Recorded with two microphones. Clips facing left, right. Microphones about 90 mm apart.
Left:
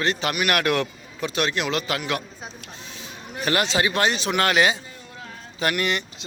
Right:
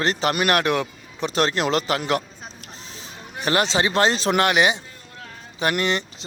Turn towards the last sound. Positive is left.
turn(degrees=-30)  # may be behind; listen again after turning